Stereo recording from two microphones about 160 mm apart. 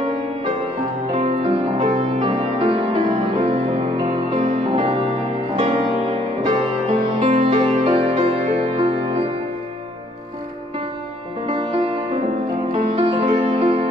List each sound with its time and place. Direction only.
1.1 s music: 40° right (ahead or behind)
2.2 s music: 35° right (ahead or behind)
11.6 s music: 35° right (ahead or behind)